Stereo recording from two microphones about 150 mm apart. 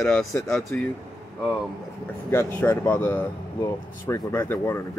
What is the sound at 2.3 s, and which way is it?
Speech, 10° left (ahead or behind).